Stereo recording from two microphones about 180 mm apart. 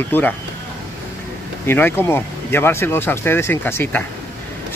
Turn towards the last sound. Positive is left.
turn(degrees=10)  # may be behind; listen again after turning